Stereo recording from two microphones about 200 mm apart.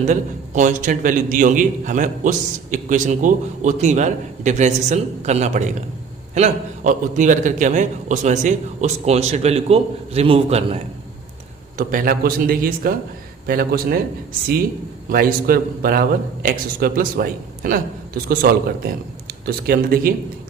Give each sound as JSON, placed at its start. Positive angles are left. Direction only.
{"t": 0.1, "sound": "a man's voice", "side_deg": -40}
{"t": 11.8, "sound": "a man's voice", "side_deg": -45}
{"t": 15.1, "sound": "a man's voice", "side_deg": -45}